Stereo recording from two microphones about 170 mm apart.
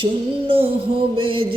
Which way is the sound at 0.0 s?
30° right (ahead or behind).